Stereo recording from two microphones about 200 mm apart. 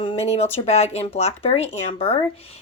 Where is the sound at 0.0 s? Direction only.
30° left (ahead or behind).